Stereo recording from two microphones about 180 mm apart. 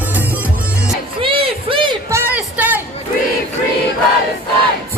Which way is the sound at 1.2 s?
30° right (ahead or behind).